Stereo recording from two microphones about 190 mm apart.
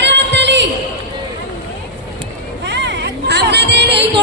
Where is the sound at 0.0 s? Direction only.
70° right (ahead or behind).